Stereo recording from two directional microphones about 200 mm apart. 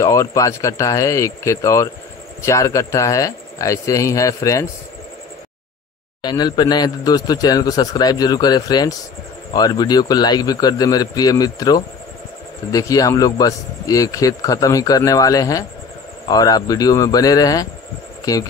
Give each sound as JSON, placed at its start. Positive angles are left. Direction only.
{"t": 0.0, "sound": "speech", "side_deg": 15}
{"t": 6.2, "sound": "a man's voice", "side_deg": 20}